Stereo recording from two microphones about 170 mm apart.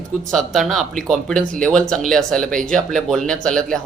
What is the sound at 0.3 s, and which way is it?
Speech, centre (ahead or behind).